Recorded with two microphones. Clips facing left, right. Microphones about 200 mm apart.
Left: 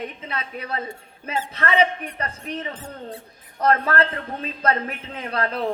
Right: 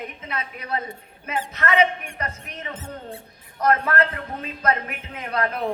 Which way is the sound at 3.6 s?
30° left (ahead or behind).